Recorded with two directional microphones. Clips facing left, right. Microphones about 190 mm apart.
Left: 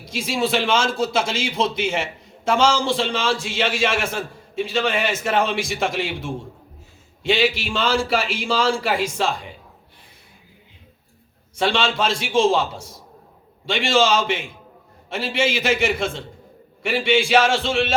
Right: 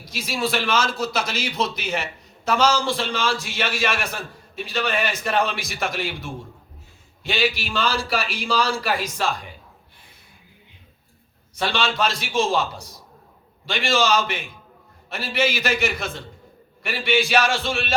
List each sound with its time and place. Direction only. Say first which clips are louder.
0.0 s a man's voice: left 3 dB; 25° left (ahead or behind)
11.5 s a man's voice: left 3 dB; 25° left (ahead or behind)